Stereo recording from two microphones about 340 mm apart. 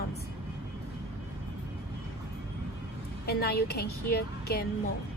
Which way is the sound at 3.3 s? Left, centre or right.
Left.